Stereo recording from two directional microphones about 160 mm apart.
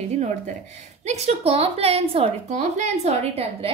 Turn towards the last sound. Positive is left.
turn(degrees=-45)  # may be behind; listen again after turning